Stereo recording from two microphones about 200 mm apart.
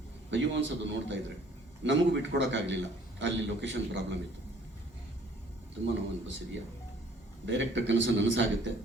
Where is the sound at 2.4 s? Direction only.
65° right (ahead or behind).